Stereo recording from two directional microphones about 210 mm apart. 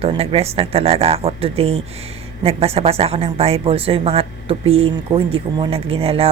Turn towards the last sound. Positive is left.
turn(degrees=-25)  # may be behind; listen again after turning